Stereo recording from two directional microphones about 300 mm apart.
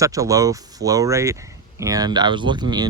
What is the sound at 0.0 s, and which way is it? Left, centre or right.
Speech, centre.